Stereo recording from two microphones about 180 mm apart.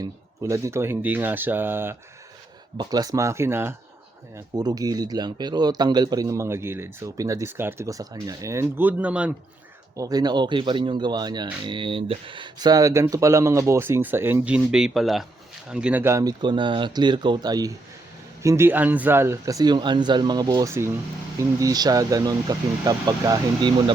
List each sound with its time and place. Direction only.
0.0 s speech: 15° right (ahead or behind)
9.9 s speech: 20° right (ahead or behind)